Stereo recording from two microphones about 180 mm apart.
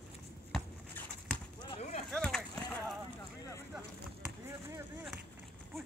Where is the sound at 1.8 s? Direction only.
45° left (ahead or behind).